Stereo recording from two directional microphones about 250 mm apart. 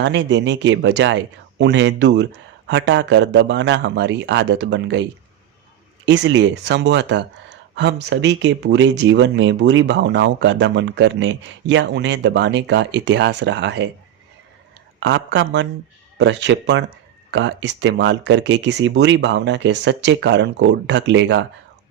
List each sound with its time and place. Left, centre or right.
0.0 s speech: right
6.1 s speech: right
15.0 s speech: right